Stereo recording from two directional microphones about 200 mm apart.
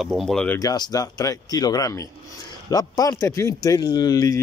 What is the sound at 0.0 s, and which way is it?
Speech, centre (ahead or behind).